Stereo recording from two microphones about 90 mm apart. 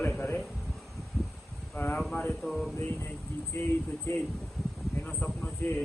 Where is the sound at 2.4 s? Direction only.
Centre (ahead or behind).